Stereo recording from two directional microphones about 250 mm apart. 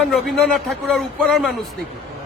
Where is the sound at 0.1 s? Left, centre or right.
Centre.